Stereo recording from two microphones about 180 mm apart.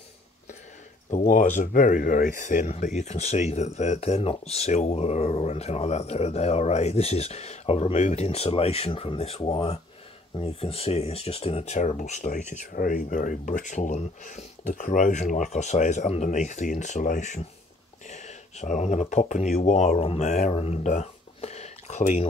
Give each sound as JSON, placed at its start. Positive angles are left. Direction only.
{"t": 1.1, "sound": "speech", "side_deg": 45}